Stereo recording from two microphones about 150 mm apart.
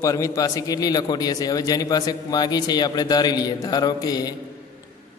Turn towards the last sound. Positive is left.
turn(degrees=25)  # may be behind; listen again after turning